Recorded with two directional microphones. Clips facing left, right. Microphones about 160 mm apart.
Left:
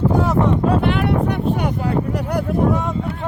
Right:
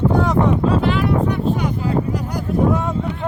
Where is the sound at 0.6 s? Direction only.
60° left (ahead or behind).